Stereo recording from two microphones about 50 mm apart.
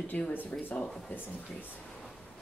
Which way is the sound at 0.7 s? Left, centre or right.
Centre.